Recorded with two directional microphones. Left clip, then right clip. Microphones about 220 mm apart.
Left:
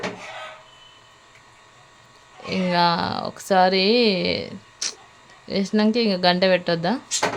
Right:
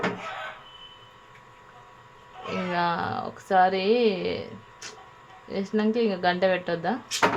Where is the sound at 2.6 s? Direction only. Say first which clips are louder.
Left 7 dB; 30° left (ahead or behind).